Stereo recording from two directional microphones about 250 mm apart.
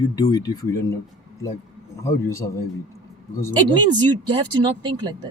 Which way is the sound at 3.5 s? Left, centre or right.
Centre.